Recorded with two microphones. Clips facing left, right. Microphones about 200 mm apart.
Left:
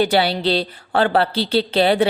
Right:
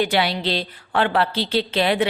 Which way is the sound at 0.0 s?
35° left (ahead or behind).